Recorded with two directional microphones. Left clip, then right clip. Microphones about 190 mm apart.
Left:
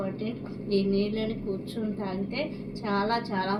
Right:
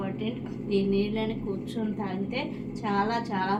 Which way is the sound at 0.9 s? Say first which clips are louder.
Even; 35° right (ahead or behind).